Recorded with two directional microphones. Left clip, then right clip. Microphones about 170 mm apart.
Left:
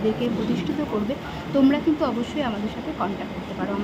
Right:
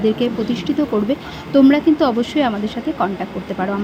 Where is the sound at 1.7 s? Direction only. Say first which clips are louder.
Right 8 dB; 30° right (ahead or behind).